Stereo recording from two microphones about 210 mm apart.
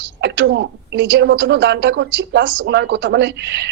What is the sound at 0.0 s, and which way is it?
A man's voice, 55° right (ahead or behind).